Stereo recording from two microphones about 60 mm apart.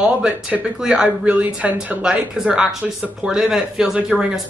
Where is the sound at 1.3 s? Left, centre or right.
Right.